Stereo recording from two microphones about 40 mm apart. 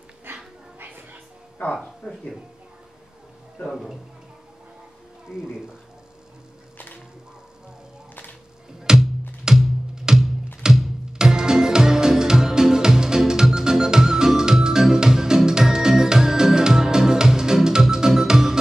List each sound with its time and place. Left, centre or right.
0.3 s dog: right
0.7 s music: right
1.6 s speech: left
8.9 s music: centre